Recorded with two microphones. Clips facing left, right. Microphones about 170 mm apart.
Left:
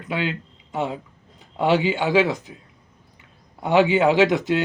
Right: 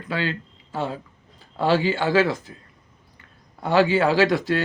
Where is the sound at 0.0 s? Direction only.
15° left (ahead or behind).